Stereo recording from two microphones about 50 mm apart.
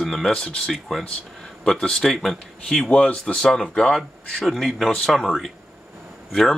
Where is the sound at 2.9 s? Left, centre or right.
Left.